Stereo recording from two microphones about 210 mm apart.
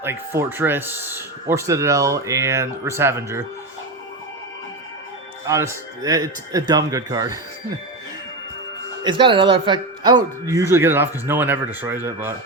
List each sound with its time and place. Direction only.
0.0 s speech: 10° right (ahead or behind)
5.5 s speech: 15° right (ahead or behind)
9.0 s speech: 25° right (ahead or behind)